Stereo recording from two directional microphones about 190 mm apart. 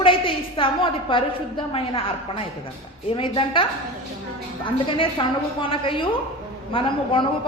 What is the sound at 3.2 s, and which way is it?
A woman's voice, 25° left (ahead or behind).